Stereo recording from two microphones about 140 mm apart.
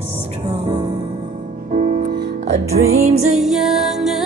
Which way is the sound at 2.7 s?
50° right (ahead or behind).